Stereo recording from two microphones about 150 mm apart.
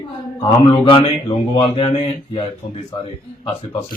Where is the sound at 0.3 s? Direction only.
35° left (ahead or behind).